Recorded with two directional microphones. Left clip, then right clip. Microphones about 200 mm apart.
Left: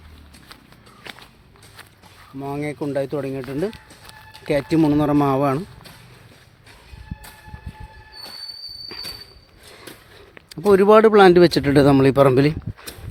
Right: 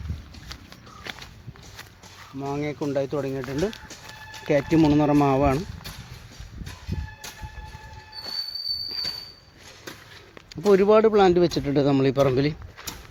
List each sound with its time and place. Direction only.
2.4 s speech: 30° left (ahead or behind)
4.4 s speech: 20° left (ahead or behind)
10.7 s speech: 35° left (ahead or behind)